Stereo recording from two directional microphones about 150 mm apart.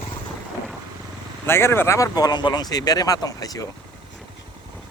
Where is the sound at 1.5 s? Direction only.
15° left (ahead or behind).